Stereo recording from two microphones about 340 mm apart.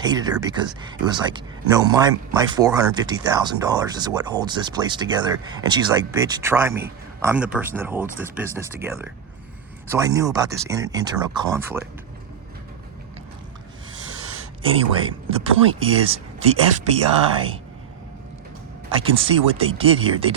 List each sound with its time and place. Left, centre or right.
0.0 s speech: centre
14.6 s speech: centre
18.9 s speech: centre